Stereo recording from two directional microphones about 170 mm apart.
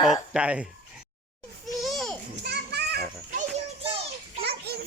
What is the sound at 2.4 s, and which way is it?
Children playing, 75° right (ahead or behind).